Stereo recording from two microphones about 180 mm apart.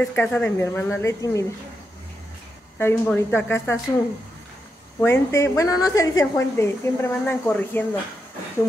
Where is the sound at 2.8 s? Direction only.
15° left (ahead or behind).